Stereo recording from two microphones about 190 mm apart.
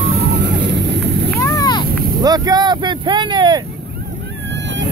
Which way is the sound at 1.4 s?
20° left (ahead or behind).